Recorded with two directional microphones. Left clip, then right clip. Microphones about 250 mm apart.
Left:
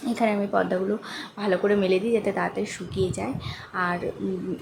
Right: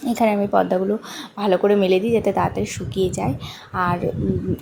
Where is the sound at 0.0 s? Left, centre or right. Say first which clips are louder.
Right 5 dB; centre.